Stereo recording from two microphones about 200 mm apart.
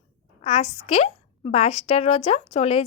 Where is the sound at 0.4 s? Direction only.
35° left (ahead or behind).